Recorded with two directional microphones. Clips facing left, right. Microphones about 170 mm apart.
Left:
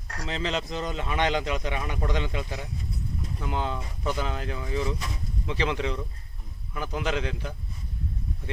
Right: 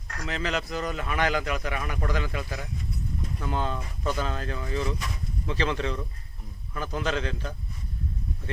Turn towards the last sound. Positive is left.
turn(degrees=15)  # may be behind; listen again after turning